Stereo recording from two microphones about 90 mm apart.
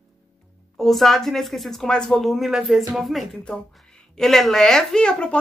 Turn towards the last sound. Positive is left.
turn(degrees=10)  # may be behind; listen again after turning